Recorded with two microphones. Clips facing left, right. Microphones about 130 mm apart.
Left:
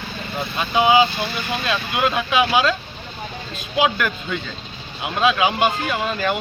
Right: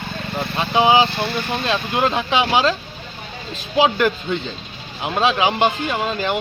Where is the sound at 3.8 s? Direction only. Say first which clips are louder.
Right 3 dB; 30° right (ahead or behind).